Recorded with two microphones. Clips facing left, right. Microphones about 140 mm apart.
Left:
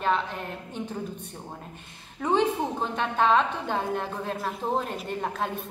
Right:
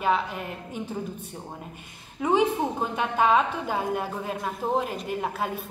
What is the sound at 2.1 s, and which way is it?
A woman's voice, 10° right (ahead or behind).